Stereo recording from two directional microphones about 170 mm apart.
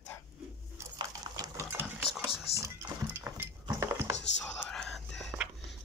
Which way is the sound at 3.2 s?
15° right (ahead or behind).